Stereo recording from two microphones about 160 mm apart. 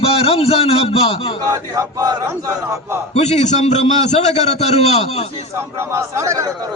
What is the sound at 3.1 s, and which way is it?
A man's voice, 45° left (ahead or behind).